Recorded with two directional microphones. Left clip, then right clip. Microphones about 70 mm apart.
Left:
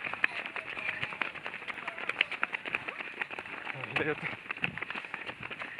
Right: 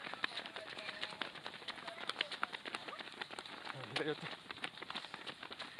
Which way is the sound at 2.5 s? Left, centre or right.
Centre.